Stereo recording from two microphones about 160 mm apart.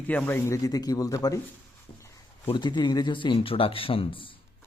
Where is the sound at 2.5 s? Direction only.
30° left (ahead or behind).